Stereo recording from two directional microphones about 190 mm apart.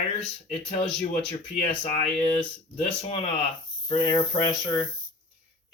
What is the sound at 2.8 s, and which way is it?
A man's voice, 30° left (ahead or behind).